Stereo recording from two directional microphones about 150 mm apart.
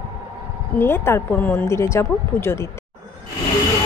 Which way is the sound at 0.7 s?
15° left (ahead or behind).